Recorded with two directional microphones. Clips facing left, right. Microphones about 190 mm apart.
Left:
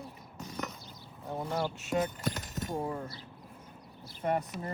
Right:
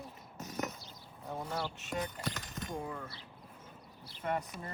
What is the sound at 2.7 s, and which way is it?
Speech, 35° left (ahead or behind).